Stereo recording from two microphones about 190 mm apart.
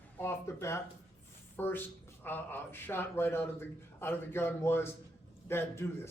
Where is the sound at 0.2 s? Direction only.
15° left (ahead or behind).